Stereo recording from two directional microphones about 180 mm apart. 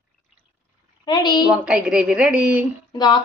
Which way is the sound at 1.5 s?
5° right (ahead or behind).